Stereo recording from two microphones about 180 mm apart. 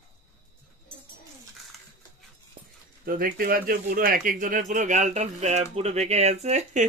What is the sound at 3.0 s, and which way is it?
Speech, 50° right (ahead or behind).